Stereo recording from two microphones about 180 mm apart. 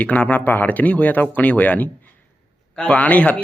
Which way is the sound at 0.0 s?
10° left (ahead or behind).